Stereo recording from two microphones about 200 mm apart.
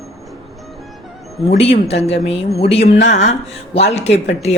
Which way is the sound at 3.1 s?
35° left (ahead or behind).